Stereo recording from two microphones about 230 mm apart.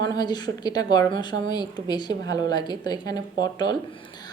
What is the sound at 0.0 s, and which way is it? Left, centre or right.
A woman's voice, centre.